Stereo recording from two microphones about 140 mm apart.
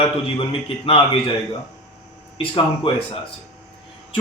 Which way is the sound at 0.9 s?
40° left (ahead or behind).